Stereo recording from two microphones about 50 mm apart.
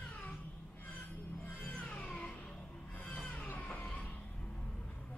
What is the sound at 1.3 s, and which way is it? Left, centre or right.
Music, left.